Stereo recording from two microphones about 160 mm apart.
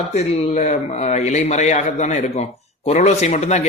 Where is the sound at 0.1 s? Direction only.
45° left (ahead or behind).